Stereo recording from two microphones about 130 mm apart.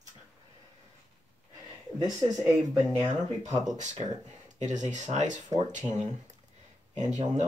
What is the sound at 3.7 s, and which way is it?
Speech, 65° right (ahead or behind).